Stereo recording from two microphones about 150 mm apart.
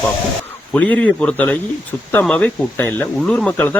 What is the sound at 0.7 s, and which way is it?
Speech, 10° left (ahead or behind).